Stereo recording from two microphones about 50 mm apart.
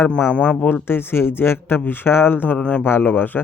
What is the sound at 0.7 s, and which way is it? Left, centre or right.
Speech, left.